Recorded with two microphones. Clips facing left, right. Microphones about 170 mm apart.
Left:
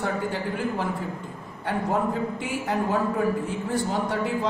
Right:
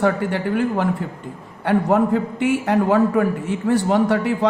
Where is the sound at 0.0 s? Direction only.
70° right (ahead or behind).